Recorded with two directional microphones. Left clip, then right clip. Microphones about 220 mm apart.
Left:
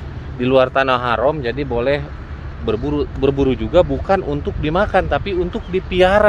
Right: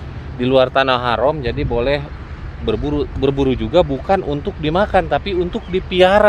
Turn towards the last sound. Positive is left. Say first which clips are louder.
# right 1 dB
turn(degrees=-25)  # may be behind; listen again after turning